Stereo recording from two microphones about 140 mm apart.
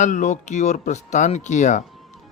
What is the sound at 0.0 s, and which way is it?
Speech, 60° left (ahead or behind).